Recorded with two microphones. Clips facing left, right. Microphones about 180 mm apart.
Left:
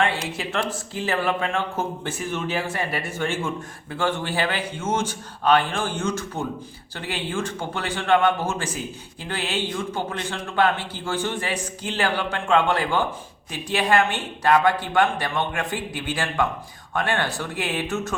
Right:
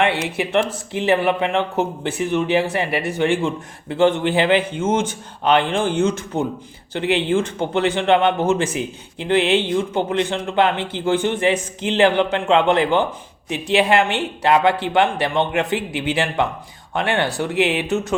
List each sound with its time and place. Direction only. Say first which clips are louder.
0.3 s a man's voice: right 7 dB; 20° right (ahead or behind)